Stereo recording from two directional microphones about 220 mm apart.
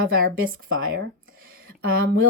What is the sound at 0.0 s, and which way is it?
Speech, 40° right (ahead or behind).